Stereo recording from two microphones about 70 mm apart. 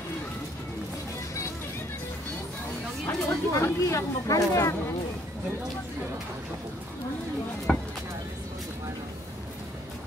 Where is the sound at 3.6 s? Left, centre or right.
Left.